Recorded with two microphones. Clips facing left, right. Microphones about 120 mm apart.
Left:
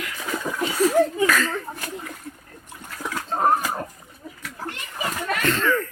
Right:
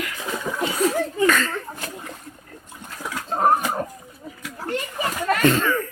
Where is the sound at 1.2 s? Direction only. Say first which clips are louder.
Right 1 dB; 5° left (ahead or behind).